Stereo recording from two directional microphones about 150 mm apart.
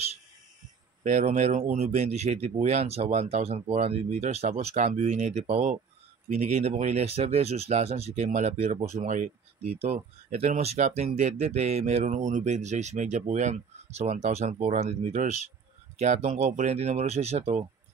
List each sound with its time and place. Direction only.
1.0 s speech: 55° right (ahead or behind)